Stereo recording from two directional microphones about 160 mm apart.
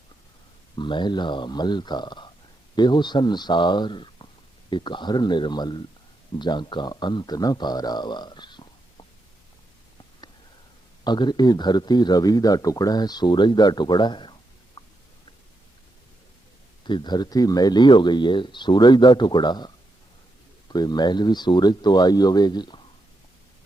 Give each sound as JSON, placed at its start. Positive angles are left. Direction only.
{"t": 0.8, "sound": "speech", "side_deg": 30}
{"t": 11.0, "sound": "speech", "side_deg": 25}
{"t": 14.8, "sound": "a sound", "side_deg": 25}
{"t": 16.8, "sound": "speech", "side_deg": 30}